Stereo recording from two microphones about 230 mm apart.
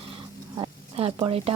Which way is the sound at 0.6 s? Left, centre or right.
Right.